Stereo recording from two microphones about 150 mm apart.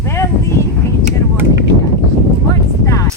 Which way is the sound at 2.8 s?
20° left (ahead or behind).